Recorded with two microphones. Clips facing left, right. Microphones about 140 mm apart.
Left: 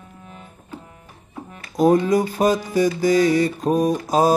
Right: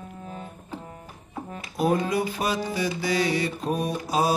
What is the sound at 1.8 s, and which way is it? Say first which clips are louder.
Mantra: left 7 dB; 40° left (ahead or behind).